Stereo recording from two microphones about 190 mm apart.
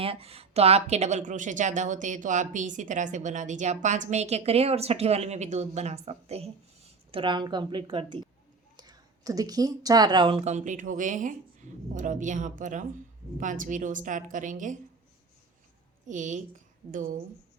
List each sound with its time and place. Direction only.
0.0 s a woman's voice: 30° right (ahead or behind)
16.0 s speech: 40° right (ahead or behind)